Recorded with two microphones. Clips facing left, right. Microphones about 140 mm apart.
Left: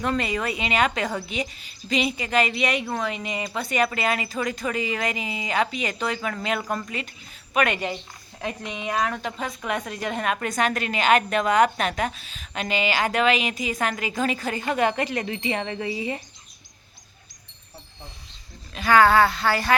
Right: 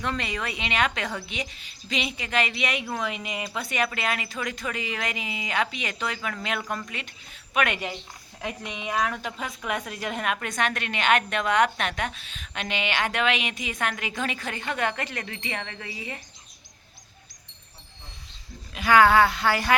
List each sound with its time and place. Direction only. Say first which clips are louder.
0.0 s a woman's voice: left 5 dB; 5° left (ahead or behind)
14.7 s speech: left 6 dB; 30° left (ahead or behind)
18.7 s speech: left 1 dB; 15° right (ahead or behind)